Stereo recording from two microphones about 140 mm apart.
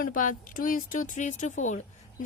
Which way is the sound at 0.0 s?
75° left (ahead or behind).